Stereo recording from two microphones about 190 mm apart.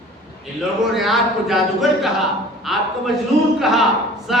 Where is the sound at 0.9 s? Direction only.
Centre (ahead or behind).